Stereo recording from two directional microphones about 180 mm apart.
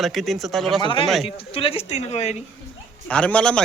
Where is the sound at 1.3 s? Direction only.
30° left (ahead or behind).